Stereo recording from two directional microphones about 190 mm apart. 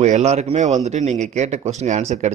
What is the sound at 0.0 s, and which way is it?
A man's voice, 35° right (ahead or behind).